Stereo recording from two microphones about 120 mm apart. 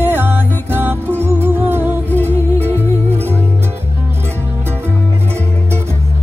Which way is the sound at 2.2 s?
60° right (ahead or behind).